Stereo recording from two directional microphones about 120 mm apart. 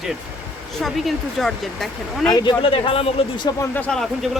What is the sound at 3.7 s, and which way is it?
Speech, 5° left (ahead or behind).